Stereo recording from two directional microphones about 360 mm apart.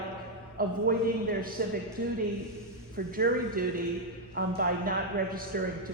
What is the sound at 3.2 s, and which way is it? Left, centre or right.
A man's voice, right.